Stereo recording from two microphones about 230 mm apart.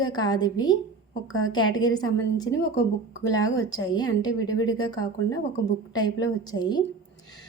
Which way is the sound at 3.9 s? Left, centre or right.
Centre.